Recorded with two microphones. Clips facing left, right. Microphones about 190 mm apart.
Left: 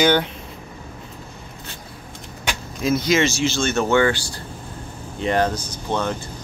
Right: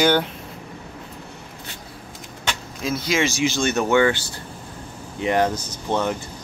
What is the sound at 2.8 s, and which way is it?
Speech, 5° right (ahead or behind).